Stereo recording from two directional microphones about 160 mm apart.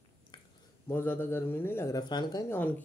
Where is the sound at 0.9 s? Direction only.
15° left (ahead or behind).